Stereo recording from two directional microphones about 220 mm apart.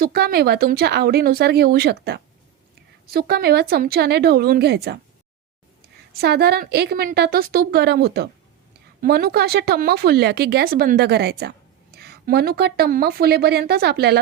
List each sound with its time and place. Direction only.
0.0 s speech: 45° right (ahead or behind)
6.1 s speech: 45° right (ahead or behind)